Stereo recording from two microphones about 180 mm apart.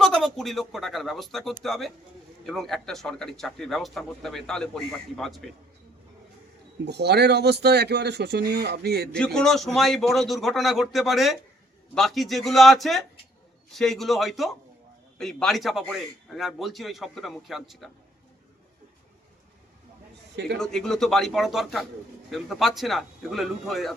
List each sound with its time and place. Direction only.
0.0 s speech: centre (ahead or behind)
6.8 s a man's voice: 65° right (ahead or behind)
9.1 s speech: 5° left (ahead or behind)
20.6 s speech: 5° left (ahead or behind)